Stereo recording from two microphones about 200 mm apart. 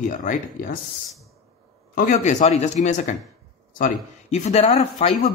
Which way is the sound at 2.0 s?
40° left (ahead or behind).